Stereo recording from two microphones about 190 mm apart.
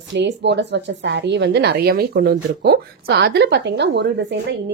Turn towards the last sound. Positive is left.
turn(degrees=-65)  # may be behind; listen again after turning